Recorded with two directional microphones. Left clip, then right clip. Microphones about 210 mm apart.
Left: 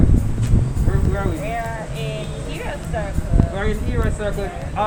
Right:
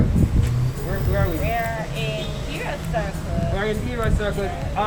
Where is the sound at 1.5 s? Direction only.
5° left (ahead or behind).